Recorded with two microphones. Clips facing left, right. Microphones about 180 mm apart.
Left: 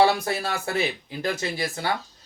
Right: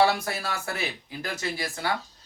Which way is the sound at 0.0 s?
20° left (ahead or behind).